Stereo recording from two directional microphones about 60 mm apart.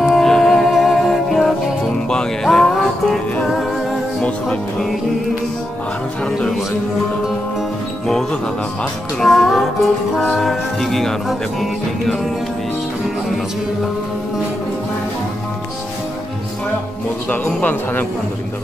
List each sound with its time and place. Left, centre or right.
0.0 s music: centre
8.1 s speech: centre
9.2 s music: centre
17.6 s speech: left